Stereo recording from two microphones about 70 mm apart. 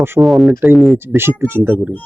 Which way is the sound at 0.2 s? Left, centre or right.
Centre.